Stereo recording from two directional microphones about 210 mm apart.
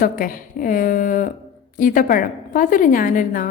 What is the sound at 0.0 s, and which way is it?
A woman's voice, 40° left (ahead or behind).